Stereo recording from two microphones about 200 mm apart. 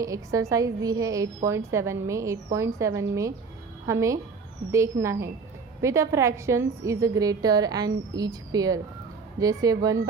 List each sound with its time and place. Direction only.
0.0 s a woman's voice: 15° right (ahead or behind)